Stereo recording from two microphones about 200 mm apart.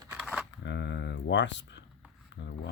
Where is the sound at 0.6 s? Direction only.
60° left (ahead or behind).